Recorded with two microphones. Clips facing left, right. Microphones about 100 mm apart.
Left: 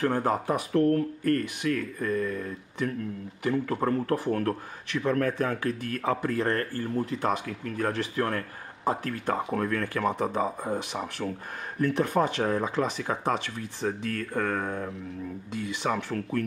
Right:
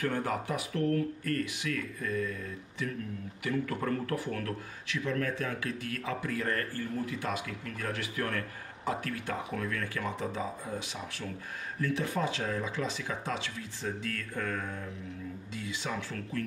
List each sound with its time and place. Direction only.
0.0 s a man's voice: 35° left (ahead or behind); by 2.9 s 55° left (ahead or behind)
3.4 s a man's voice: 30° left (ahead or behind)
4.9 s speech: 55° left (ahead or behind)
6.4 s a man's voice: 35° left (ahead or behind); by 16.4 s 60° left (ahead or behind)